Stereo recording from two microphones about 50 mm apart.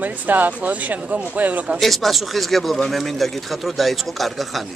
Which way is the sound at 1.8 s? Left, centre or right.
Centre.